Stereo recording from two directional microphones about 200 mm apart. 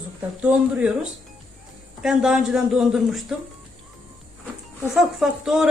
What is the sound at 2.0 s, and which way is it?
A man's voice, 5° right (ahead or behind).